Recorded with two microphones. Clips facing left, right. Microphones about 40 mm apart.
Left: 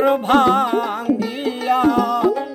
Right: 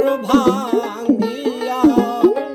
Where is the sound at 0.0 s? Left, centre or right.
Left.